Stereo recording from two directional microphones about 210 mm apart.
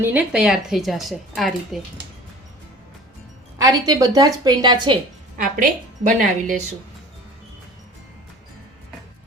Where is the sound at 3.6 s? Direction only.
15° right (ahead or behind).